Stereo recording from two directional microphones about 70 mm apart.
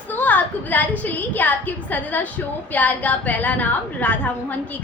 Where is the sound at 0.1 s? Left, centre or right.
Left.